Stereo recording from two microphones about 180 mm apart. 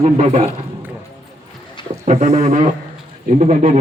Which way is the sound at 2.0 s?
40° right (ahead or behind).